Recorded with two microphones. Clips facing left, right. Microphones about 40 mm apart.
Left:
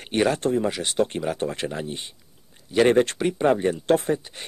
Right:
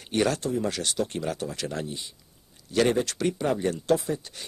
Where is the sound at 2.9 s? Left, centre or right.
Left.